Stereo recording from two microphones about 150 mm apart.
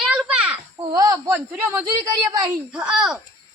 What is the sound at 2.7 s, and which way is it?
Speech, 5° right (ahead or behind).